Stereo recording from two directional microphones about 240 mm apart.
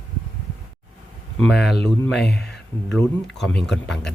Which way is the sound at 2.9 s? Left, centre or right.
Centre.